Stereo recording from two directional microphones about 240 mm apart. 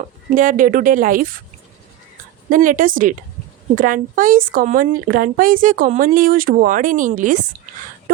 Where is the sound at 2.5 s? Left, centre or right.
Right.